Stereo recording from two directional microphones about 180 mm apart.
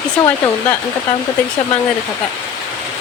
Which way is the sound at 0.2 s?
10° left (ahead or behind).